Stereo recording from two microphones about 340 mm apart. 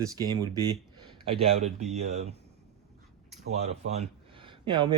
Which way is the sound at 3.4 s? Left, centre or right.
Centre.